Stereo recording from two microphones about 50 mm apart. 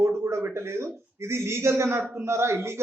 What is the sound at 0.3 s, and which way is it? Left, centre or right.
A man's voice, right.